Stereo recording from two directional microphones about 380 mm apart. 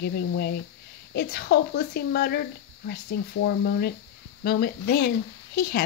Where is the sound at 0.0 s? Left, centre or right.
Left.